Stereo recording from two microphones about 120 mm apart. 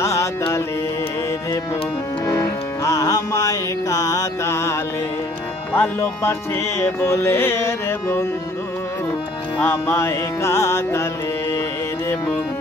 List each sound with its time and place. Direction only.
0.0 s music: 25° left (ahead or behind)
2.2 s music: 25° left (ahead or behind)
9.6 s music: 20° left (ahead or behind)